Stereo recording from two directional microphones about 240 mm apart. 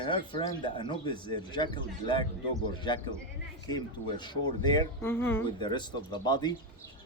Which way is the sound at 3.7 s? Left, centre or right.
Centre.